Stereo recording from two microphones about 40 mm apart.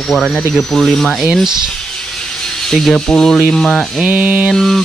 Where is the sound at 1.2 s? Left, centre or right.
Centre.